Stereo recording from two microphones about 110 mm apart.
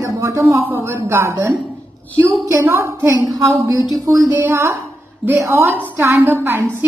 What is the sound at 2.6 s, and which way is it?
Speech, 25° right (ahead or behind).